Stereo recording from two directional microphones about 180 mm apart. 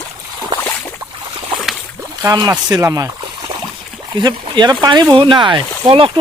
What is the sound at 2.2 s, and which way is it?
Speech, 15° right (ahead or behind).